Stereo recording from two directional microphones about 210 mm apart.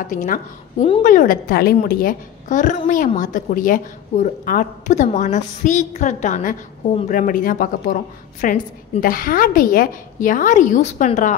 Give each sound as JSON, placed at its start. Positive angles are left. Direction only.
{"t": 0.0, "sound": "a woman's voice", "side_deg": 40}
{"t": 1.0, "sound": "a woman's voice", "side_deg": 40}